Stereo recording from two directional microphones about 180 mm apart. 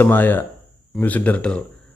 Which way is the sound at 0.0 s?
10° left (ahead or behind).